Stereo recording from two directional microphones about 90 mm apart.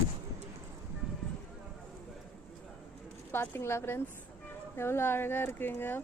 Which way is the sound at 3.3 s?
25° left (ahead or behind).